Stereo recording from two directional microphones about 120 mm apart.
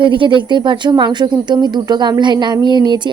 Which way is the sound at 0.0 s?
45° right (ahead or behind).